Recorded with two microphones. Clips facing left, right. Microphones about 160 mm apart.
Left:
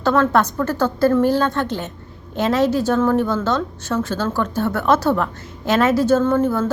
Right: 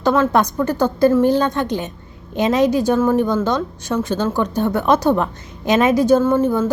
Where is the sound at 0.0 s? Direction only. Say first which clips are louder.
Right 1 dB; 15° right (ahead or behind).